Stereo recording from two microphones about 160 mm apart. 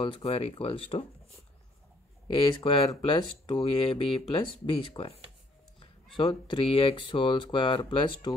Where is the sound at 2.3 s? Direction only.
30° left (ahead or behind).